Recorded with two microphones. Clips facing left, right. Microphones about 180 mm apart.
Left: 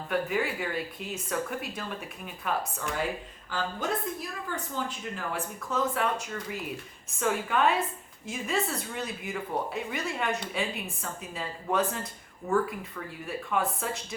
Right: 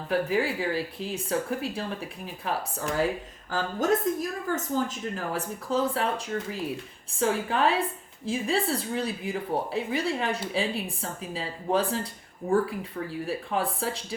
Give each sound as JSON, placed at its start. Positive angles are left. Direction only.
{"t": 0.1, "sound": "a woman's voice", "side_deg": -30}
{"t": 3.5, "sound": "a woman's voice", "side_deg": -45}